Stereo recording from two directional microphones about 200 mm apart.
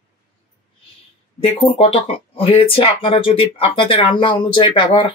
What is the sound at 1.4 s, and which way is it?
Speech, 30° left (ahead or behind).